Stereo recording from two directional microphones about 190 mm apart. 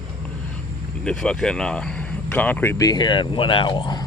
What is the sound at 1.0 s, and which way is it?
Speech, 5° left (ahead or behind).